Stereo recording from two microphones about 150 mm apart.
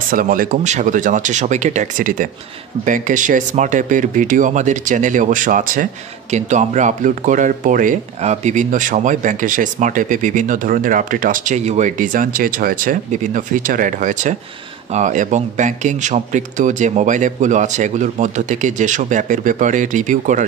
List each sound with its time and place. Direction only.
0.1 s speech: 70° right (ahead or behind)
6.3 s speech: 55° right (ahead or behind)